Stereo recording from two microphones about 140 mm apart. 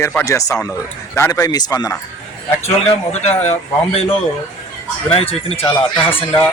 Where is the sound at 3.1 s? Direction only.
55° left (ahead or behind).